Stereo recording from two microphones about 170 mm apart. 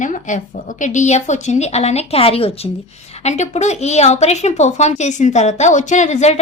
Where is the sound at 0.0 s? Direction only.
50° left (ahead or behind).